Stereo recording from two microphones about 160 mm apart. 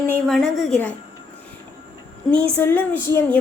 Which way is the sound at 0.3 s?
Centre (ahead or behind).